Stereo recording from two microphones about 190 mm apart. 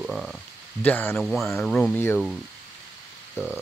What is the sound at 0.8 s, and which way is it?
Speech, 10° left (ahead or behind).